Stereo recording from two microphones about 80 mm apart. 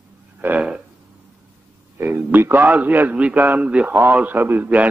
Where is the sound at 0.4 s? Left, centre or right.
Right.